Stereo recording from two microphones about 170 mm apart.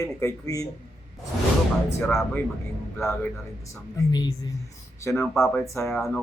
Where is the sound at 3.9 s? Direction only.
20° left (ahead or behind).